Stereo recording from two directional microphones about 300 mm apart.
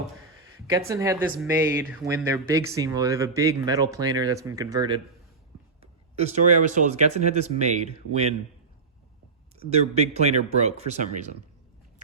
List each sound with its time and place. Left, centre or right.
0.7 s speech: centre
9.6 s speech: right